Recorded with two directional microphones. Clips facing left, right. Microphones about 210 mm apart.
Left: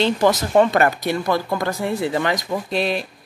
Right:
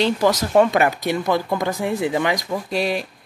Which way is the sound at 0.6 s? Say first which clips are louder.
Even; 15° right (ahead or behind).